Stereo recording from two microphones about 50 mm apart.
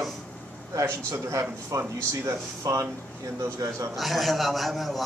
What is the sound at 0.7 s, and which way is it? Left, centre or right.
Speech, right.